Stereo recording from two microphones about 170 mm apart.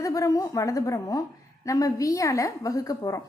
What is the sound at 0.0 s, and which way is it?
A woman's voice, 20° left (ahead or behind).